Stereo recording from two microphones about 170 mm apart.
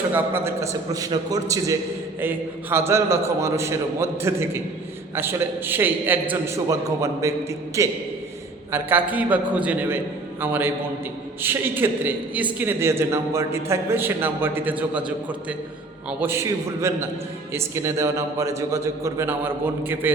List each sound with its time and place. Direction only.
0.1 s a man's voice: 15° right (ahead or behind)